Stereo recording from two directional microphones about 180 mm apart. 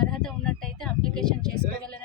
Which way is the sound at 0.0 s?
5° left (ahead or behind).